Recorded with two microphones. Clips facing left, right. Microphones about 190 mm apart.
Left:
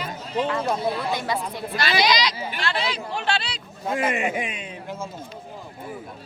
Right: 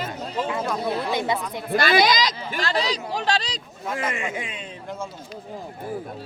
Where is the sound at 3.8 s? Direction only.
25° left (ahead or behind).